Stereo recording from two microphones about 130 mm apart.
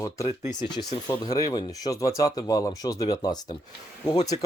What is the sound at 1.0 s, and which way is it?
Speech, 30° left (ahead or behind).